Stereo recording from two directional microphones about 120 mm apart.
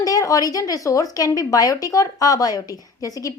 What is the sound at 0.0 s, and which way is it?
Speech, 30° left (ahead or behind).